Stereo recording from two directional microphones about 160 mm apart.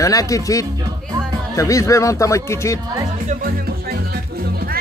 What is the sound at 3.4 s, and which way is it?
Music, 75° right (ahead or behind).